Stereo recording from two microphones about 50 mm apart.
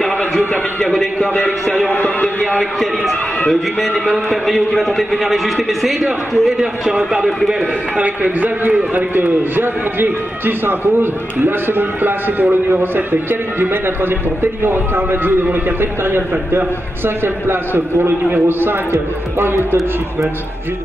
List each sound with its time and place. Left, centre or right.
0.5 s a sound: centre
4.1 s a man's voice: centre
7.2 s a man's voice: centre
8.0 s a man's voice: right